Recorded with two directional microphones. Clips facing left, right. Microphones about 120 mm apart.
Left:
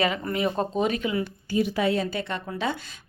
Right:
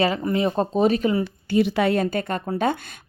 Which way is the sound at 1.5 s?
75° right (ahead or behind).